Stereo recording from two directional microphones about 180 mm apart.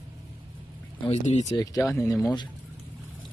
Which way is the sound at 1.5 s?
20° left (ahead or behind).